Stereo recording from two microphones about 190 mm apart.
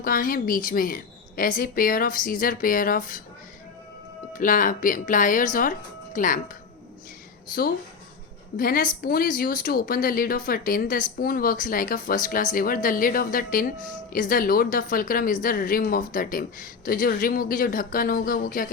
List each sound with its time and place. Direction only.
0.0 s speech: 45° left (ahead or behind)
4.4 s speech: 45° left (ahead or behind)
8.5 s speech: 45° left (ahead or behind)